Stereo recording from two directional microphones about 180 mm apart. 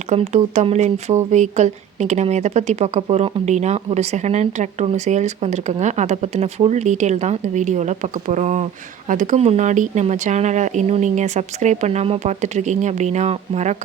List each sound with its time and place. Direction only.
0.1 s speech: 40° right (ahead or behind)